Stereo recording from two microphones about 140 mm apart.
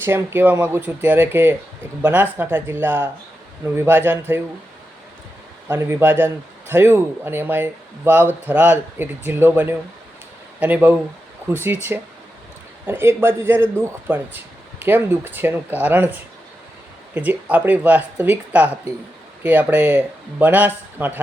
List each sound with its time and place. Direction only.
0.0 s a man's voice: 15° right (ahead or behind)
5.6 s a man's voice: 20° right (ahead or behind)